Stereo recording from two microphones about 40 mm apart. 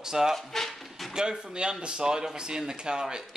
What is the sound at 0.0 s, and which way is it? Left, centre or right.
Speech, centre.